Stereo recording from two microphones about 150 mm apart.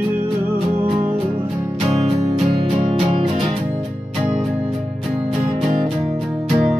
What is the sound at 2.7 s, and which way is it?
Music, 45° right (ahead or behind).